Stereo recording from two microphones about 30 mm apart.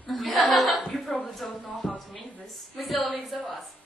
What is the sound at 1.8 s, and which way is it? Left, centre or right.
Speech, left.